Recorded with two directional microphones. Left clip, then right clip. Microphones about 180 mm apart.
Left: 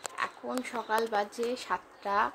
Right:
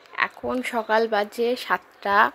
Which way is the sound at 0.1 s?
25° right (ahead or behind).